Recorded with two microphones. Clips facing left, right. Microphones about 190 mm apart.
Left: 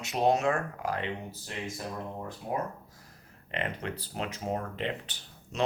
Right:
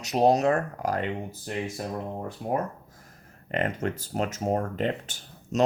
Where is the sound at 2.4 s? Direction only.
55° right (ahead or behind).